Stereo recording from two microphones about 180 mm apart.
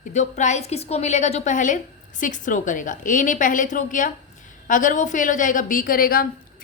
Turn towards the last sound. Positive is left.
turn(degrees=55)  # may be behind; listen again after turning